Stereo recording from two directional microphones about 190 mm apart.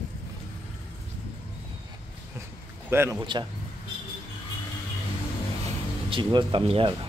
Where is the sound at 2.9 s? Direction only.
10° right (ahead or behind).